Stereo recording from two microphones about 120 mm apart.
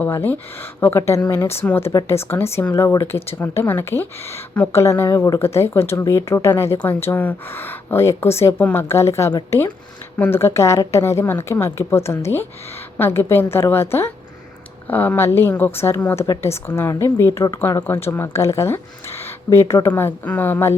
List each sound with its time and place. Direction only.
0.0 s a woman's voice: 15° left (ahead or behind)